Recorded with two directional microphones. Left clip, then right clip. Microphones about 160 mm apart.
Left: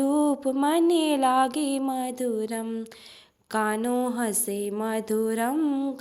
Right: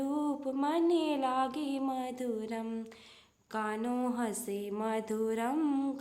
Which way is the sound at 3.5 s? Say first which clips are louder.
Left 9 dB; 40° left (ahead or behind).